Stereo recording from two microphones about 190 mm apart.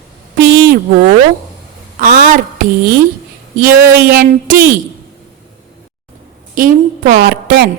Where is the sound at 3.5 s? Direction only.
50° right (ahead or behind).